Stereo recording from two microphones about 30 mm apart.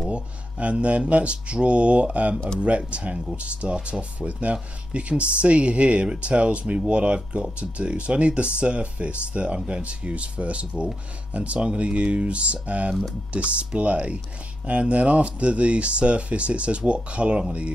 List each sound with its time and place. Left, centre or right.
0.1 s speech: right